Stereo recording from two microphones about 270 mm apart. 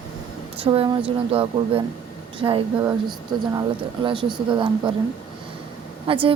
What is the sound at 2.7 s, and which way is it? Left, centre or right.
Speech, centre.